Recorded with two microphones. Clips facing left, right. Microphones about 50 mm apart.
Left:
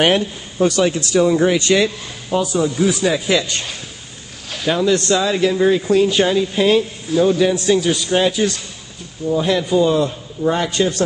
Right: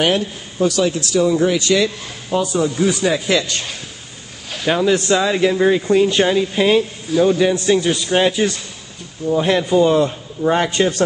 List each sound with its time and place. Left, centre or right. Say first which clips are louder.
0.0 s speech: left 2 dB; left
2.2 s speech: even; centre
4.6 s a man's voice: right 1 dB; centre
9.3 s a man's voice: right 1 dB; right